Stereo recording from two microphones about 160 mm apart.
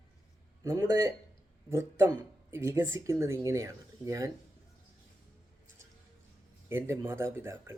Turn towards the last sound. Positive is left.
turn(degrees=-15)  # may be behind; listen again after turning